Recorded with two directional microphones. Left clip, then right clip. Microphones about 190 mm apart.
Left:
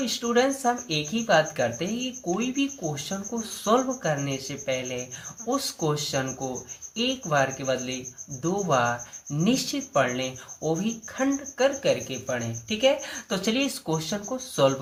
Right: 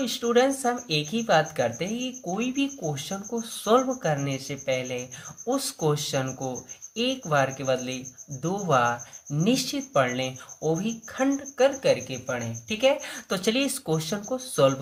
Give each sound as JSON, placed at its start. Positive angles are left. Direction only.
{"t": 0.0, "sound": "speech", "side_deg": -20}